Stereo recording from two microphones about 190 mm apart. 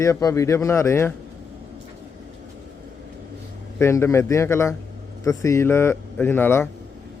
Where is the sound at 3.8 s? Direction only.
15° left (ahead or behind).